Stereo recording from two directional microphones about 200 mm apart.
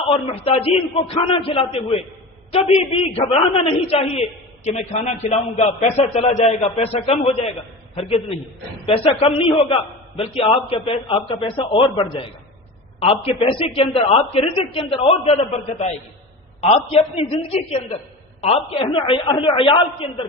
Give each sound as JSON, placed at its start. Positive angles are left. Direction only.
{"t": 0.1, "sound": "a man's voice", "side_deg": 30}
{"t": 8.9, "sound": "a man's voice", "side_deg": 30}